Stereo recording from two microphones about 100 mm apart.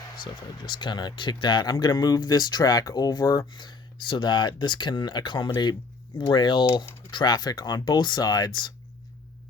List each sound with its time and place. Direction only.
0.2 s speech: 50° left (ahead or behind)